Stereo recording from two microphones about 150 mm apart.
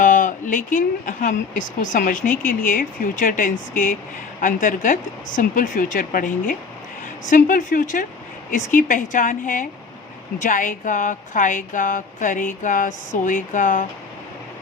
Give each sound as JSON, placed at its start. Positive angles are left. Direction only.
{"t": 0.0, "sound": "speech", "side_deg": 60}